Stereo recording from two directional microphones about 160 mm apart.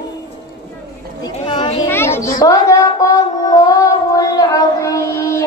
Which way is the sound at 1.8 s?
15° left (ahead or behind).